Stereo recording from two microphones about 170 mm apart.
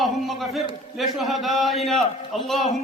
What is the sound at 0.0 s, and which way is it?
A man's voice, centre (ahead or behind).